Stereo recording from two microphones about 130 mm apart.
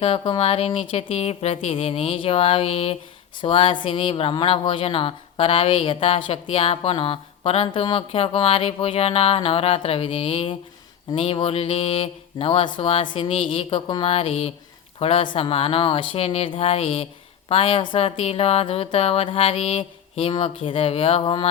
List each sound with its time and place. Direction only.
0.0 s speech: 45° left (ahead or behind)